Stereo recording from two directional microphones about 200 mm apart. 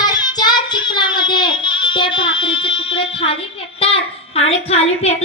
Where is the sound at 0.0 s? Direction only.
20° left (ahead or behind).